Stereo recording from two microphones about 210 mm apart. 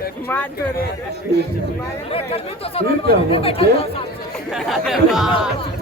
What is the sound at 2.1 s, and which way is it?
Speech, 25° left (ahead or behind).